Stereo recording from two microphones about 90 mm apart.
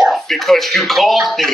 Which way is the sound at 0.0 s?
Centre (ahead or behind).